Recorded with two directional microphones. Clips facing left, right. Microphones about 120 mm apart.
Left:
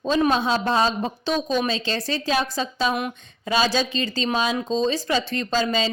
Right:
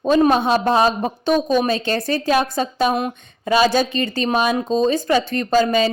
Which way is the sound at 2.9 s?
30° right (ahead or behind).